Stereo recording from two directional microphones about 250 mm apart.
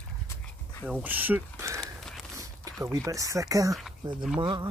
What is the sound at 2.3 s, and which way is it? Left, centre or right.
Speech, centre.